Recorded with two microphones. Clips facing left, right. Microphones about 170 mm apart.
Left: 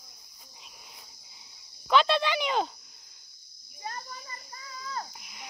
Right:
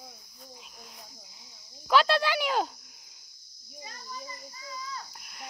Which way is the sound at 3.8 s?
60° left (ahead or behind).